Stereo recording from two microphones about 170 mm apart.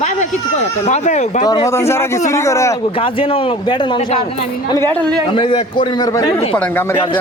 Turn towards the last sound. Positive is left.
turn(degrees=10)  # may be behind; listen again after turning